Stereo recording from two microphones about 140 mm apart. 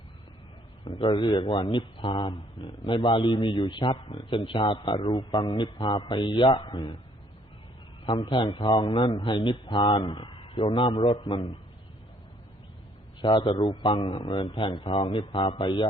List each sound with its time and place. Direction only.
0.9 s a man's voice: 35° left (ahead or behind)
8.0 s a man's voice: 35° left (ahead or behind)
13.2 s a man's voice: 35° left (ahead or behind)